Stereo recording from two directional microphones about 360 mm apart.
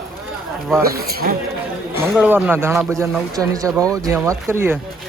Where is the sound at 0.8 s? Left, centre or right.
Right.